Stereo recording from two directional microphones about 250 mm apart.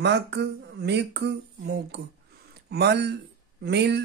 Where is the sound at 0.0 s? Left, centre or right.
Right.